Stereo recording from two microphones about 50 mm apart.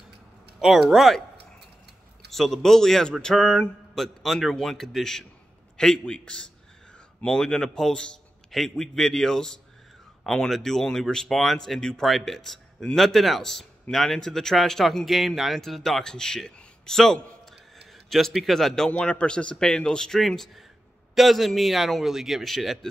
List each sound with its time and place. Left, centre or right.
0.6 s speech: centre
2.3 s speech: centre
18.9 s speech: left
20.2 s speech: centre